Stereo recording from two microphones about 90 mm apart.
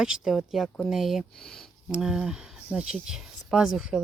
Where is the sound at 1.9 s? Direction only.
10° right (ahead or behind).